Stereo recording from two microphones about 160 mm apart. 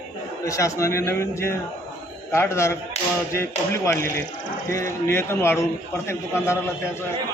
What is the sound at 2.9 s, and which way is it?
Tap, 40° left (ahead or behind).